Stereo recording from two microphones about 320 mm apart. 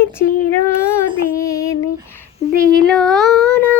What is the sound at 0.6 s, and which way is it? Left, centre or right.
Child singing, centre.